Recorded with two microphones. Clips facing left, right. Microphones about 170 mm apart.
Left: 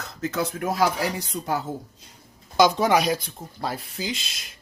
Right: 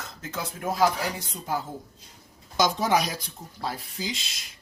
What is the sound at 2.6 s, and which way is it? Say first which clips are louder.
Speech: left 5 dB; 65° left (ahead or behind).